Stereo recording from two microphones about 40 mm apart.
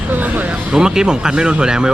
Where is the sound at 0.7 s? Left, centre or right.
Centre.